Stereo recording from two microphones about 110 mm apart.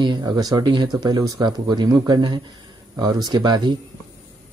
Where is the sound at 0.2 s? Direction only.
35° right (ahead or behind).